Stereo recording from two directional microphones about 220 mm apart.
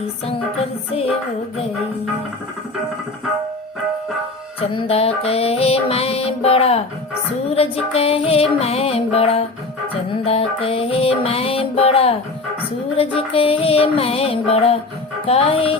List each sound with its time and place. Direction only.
0.3 s music: 25° left (ahead or behind)
4.6 s music: 25° left (ahead or behind)